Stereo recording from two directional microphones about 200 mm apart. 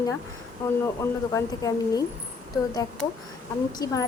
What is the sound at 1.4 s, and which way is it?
Speech, 15° left (ahead or behind).